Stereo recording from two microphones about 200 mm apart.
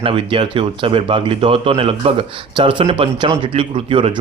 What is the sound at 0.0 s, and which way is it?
Speech, 25° right (ahead or behind).